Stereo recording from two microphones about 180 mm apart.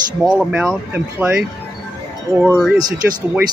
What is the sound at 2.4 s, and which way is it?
Speech, 5° left (ahead or behind).